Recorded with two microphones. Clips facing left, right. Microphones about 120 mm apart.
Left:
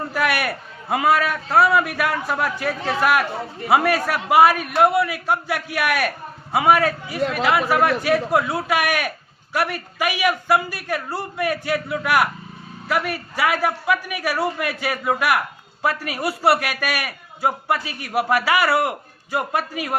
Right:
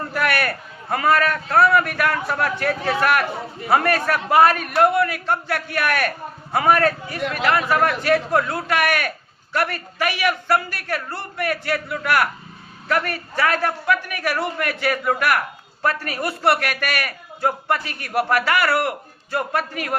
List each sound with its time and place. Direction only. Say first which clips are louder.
0.1 s speech: right 1 dB; 10° left (ahead or behind)